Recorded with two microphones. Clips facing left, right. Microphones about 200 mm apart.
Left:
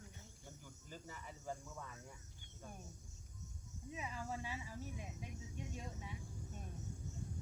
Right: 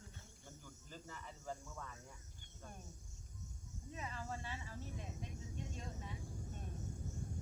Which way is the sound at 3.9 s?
10° left (ahead or behind).